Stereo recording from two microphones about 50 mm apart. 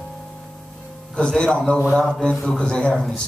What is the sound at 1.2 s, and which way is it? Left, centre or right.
A man's voice, centre.